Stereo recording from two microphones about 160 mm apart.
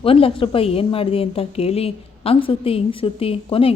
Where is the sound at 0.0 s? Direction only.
35° left (ahead or behind).